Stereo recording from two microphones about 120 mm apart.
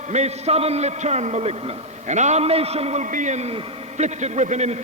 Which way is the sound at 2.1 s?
75° right (ahead or behind).